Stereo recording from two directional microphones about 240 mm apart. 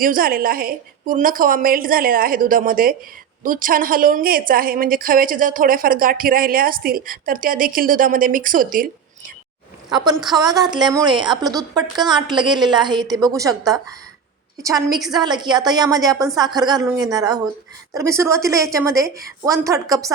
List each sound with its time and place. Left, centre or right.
0.0 s a woman's voice: right
10.3 s a woman's voice: centre